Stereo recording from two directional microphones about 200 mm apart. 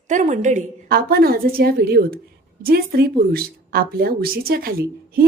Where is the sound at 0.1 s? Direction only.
40° right (ahead or behind).